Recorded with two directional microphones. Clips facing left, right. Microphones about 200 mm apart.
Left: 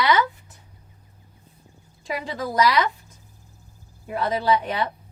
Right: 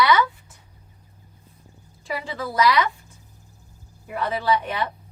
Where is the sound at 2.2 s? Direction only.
40° left (ahead or behind).